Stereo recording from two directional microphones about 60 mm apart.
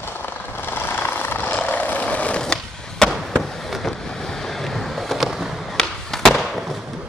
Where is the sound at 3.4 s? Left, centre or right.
Centre.